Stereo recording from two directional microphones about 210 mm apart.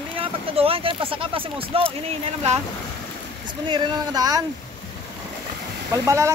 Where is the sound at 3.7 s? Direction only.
20° right (ahead or behind).